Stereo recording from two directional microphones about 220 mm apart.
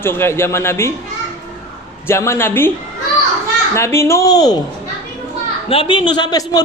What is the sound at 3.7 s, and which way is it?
Speech, 10° left (ahead or behind).